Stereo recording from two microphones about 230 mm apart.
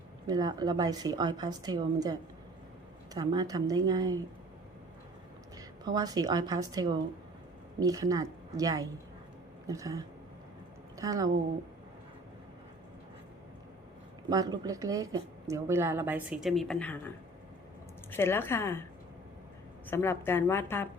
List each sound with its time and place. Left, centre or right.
0.3 s a woman's voice: centre
3.2 s a woman's voice: centre
5.5 s a woman's voice: centre
14.3 s a woman's voice: centre
18.1 s a woman's voice: centre
19.9 s a woman's voice: centre